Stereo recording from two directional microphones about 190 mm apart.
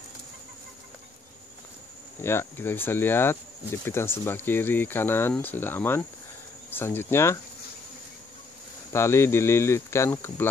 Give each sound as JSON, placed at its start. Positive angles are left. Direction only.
{"t": 2.2, "sound": "speech", "side_deg": 10}
{"t": 8.9, "sound": "speech", "side_deg": 15}